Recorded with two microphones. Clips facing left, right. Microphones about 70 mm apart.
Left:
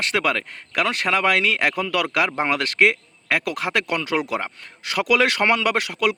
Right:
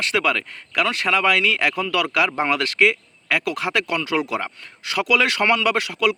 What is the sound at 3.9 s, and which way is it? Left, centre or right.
A man's voice, left.